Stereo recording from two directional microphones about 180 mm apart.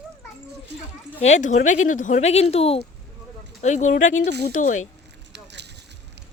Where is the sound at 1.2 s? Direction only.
40° left (ahead or behind).